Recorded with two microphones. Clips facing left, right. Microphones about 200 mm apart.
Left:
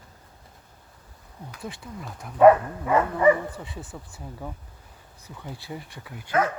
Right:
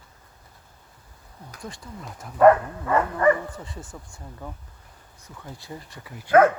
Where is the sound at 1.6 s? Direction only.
Centre (ahead or behind).